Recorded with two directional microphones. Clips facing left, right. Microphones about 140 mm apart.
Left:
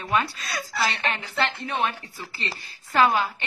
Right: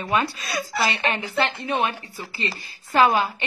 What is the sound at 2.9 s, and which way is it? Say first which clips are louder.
Speech: right 2 dB; 15° right (ahead or behind).